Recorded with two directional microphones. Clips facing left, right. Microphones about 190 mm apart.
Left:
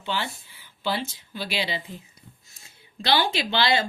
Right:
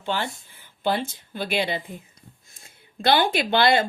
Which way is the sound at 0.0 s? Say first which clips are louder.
Right 2 dB; 50° right (ahead or behind).